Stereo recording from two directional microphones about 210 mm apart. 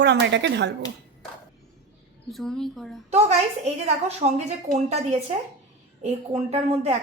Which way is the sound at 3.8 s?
30° right (ahead or behind).